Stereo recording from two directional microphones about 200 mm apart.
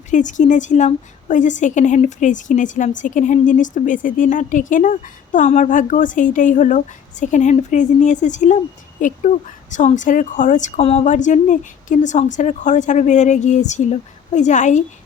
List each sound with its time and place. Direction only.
0.1 s a woman's voice: 40° left (ahead or behind)